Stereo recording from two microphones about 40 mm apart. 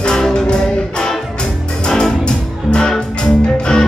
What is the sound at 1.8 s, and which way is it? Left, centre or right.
Music, centre.